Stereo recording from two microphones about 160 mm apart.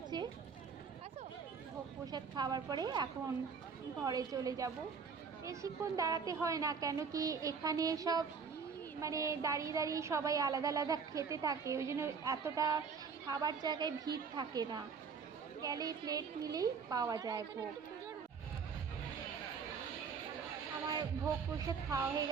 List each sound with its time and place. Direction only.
0.1 s run: 30° right (ahead or behind)
2.1 s a woman's voice: 25° right (ahead or behind)
21.6 s a woman's voice: 20° right (ahead or behind)